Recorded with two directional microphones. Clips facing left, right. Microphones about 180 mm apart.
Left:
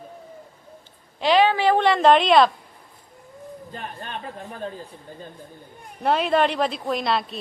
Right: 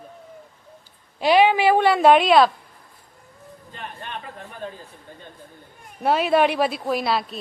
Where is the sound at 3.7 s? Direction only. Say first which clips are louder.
Left 1 dB; 40° left (ahead or behind).